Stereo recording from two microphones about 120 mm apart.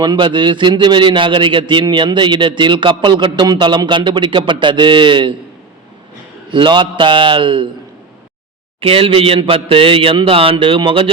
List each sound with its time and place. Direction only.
0.0 s a man's voice: 40° right (ahead or behind)
6.5 s a man's voice: 45° right (ahead or behind)
8.8 s a man's voice: 50° right (ahead or behind)